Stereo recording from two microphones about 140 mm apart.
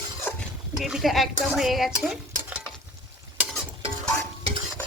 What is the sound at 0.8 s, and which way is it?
A woman's voice, centre (ahead or behind).